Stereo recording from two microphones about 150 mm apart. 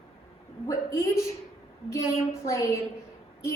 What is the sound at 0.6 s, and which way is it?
Speech, 20° left (ahead or behind).